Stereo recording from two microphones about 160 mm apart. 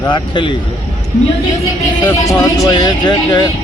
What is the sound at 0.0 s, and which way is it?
Speech, 30° left (ahead or behind).